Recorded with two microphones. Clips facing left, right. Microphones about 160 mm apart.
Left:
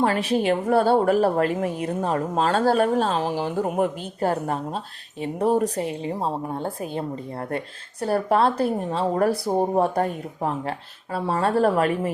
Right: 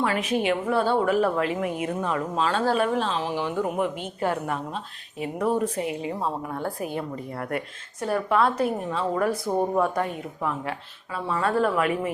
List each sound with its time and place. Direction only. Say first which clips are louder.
0.0 s speech: left 3 dB; 35° left (ahead or behind)
8.0 s speech: left 2 dB; 35° left (ahead or behind)